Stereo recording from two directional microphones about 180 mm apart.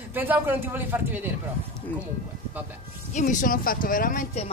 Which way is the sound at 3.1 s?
45° left (ahead or behind).